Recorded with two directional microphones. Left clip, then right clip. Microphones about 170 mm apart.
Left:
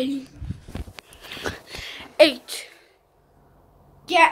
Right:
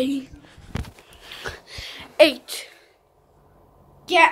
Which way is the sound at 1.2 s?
10° left (ahead or behind).